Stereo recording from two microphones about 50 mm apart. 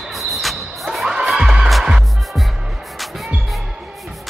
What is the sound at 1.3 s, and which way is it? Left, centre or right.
Music, centre.